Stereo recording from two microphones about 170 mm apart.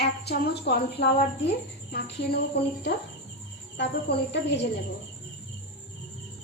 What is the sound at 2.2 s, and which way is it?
Speech, 90° left.